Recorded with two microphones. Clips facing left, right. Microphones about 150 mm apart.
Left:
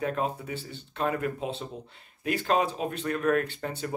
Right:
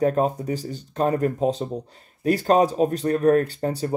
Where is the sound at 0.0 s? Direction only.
40° right (ahead or behind).